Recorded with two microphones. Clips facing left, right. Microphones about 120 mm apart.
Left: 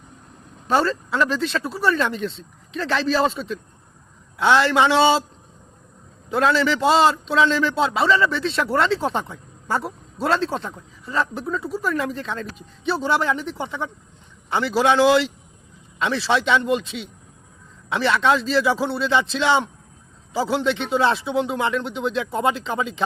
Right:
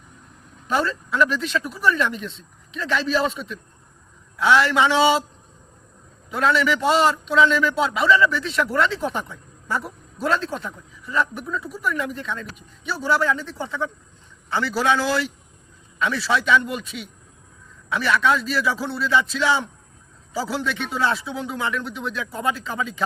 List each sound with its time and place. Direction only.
0.7 s a woman's voice: 30° left (ahead or behind)
6.3 s a woman's voice: 30° left (ahead or behind)